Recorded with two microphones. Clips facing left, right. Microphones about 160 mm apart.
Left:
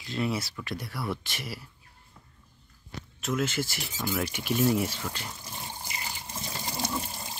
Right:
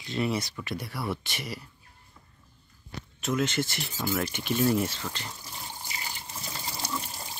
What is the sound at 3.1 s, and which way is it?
Speech, centre (ahead or behind).